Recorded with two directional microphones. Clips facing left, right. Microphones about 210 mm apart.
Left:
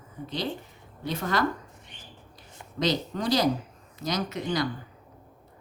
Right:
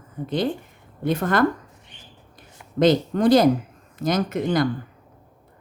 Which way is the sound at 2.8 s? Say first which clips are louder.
Right 10 dB; 55° right (ahead or behind).